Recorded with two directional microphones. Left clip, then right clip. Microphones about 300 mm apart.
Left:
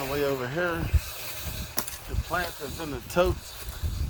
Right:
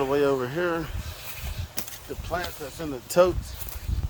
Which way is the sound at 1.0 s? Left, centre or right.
Left.